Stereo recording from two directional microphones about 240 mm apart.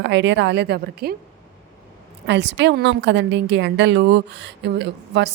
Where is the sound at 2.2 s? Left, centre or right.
Right.